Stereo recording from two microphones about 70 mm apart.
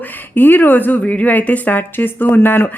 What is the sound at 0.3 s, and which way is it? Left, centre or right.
A woman's voice, left.